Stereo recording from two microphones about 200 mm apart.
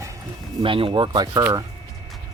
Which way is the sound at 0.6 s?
25° right (ahead or behind).